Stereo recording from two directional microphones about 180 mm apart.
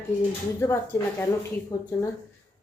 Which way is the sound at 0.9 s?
15° left (ahead or behind).